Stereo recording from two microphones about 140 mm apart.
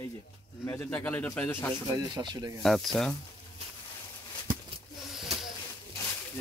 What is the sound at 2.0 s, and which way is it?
Speech, 30° right (ahead or behind).